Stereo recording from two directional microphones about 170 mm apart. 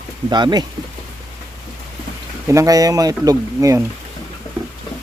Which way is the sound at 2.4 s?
20° right (ahead or behind).